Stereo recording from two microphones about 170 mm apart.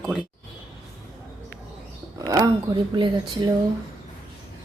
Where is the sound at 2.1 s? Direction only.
20° right (ahead or behind).